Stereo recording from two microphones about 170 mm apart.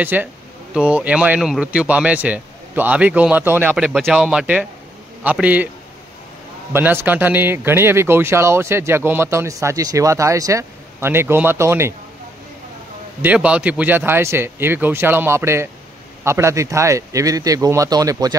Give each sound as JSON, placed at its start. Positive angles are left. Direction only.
{"t": 0.0, "sound": "a man's voice", "side_deg": -10}
{"t": 6.7, "sound": "a man's voice", "side_deg": -10}
{"t": 13.2, "sound": "a man's voice", "side_deg": -10}